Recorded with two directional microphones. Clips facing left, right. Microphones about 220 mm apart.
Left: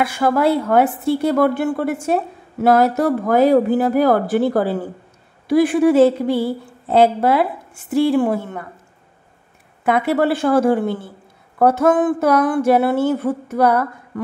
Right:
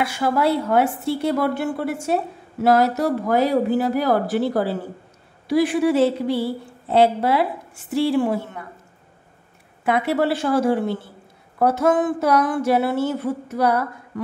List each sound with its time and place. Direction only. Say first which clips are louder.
0.0 s speech: left 4 dB; 55° left (ahead or behind)
9.8 s speech: left 3 dB; 50° left (ahead or behind)